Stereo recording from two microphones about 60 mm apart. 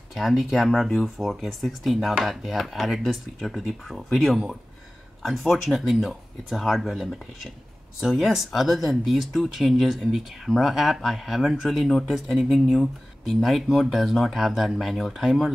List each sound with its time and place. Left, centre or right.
0.1 s speech: centre